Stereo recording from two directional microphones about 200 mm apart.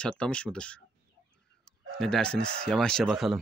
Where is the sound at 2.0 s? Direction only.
5° left (ahead or behind).